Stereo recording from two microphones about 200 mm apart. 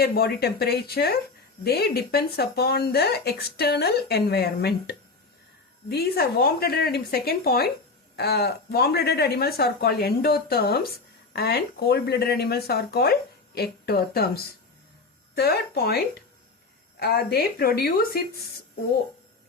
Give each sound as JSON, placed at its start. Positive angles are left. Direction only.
{"t": 0.0, "sound": "speech", "side_deg": 50}